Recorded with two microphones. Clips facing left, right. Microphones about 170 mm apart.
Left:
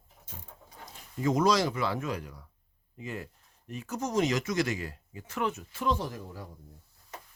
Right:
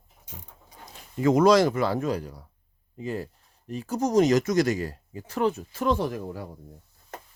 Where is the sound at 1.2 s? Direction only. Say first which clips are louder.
Right 7 dB; 65° right (ahead or behind); by 5.8 s 35° right (ahead or behind).